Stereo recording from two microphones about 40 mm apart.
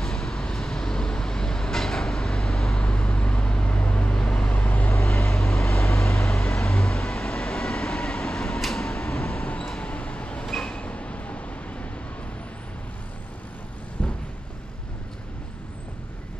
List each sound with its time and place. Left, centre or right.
0.0 s vehicle: centre
2.8 s vehicle: left
4.6 s vehicle: left
5.0 s vehicle: centre
8.5 s a sound: centre
9.4 s a sound: left
10.4 s vehicle: centre
10.8 s vehicle: left